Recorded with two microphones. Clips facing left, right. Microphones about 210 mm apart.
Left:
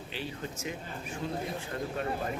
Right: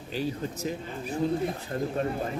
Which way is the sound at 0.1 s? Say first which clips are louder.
Right 8 dB; 40° right (ahead or behind).